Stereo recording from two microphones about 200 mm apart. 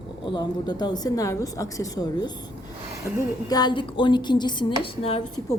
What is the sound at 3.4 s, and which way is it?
Speech, 20° left (ahead or behind).